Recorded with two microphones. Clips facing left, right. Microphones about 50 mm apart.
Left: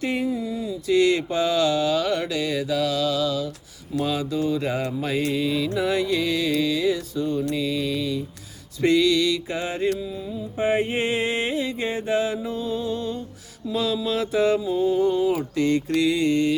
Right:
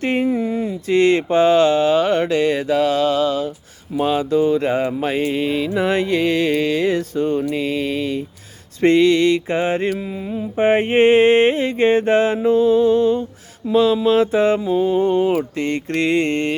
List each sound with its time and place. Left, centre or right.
0.0 s mantra: right
10.0 s mantra: right